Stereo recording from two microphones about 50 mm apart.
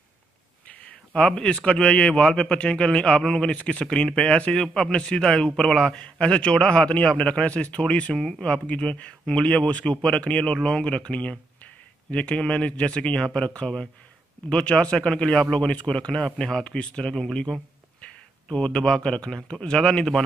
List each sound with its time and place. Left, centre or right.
0.7 s a man's voice: left